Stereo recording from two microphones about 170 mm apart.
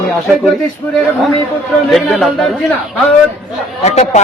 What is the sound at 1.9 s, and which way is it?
Speech, centre (ahead or behind).